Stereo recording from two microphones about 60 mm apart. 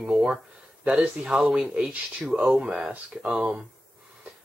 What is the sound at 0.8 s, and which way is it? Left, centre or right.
Speech, right.